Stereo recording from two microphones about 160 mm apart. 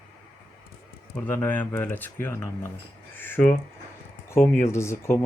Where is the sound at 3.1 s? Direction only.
10° left (ahead or behind).